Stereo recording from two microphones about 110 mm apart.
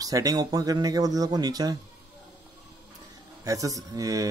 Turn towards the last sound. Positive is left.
turn(degrees=-30)  # may be behind; listen again after turning